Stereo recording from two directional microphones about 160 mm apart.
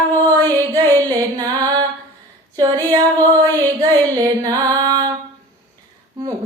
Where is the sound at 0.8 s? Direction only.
15° left (ahead or behind).